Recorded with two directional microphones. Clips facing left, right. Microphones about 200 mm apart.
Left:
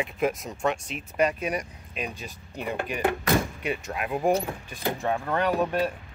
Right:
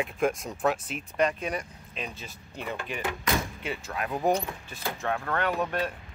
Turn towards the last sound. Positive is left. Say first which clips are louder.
# left 4 dB
turn(degrees=10)  # may be behind; listen again after turning